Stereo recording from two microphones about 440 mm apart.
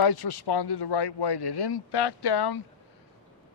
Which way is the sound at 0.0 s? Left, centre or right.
Left.